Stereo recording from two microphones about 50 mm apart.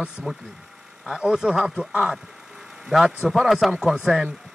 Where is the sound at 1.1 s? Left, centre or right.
Centre.